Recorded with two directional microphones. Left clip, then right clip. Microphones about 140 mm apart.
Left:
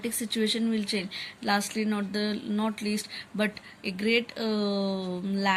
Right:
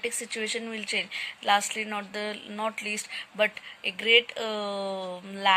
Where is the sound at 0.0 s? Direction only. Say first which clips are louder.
Left 1 dB; 15° right (ahead or behind).